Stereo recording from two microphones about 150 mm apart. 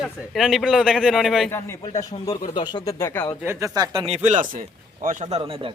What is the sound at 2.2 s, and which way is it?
Speech, 30° left (ahead or behind).